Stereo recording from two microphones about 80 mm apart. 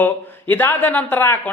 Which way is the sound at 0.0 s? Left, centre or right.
Left.